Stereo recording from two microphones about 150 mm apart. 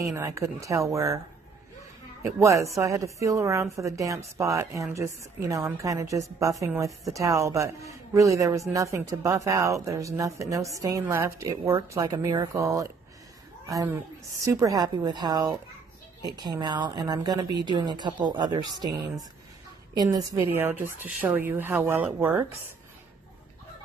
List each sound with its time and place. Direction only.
0.0 s a man's voice: 20° right (ahead or behind)
2.2 s a man's voice: 20° right (ahead or behind)